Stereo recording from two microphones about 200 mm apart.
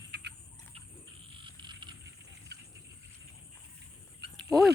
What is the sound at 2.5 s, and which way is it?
Wild animals, 55° right (ahead or behind).